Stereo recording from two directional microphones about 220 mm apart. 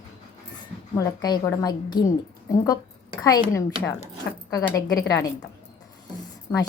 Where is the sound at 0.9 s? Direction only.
15° left (ahead or behind).